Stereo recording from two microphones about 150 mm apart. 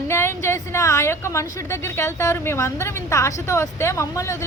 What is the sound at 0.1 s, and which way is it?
A woman's voice, 15° left (ahead or behind).